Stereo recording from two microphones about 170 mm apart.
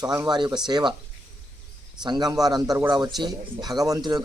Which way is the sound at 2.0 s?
25° right (ahead or behind).